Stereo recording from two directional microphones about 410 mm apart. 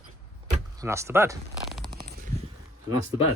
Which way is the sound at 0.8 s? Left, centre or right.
Centre.